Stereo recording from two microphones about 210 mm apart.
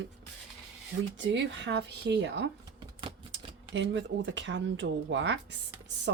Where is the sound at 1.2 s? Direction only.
60° right (ahead or behind).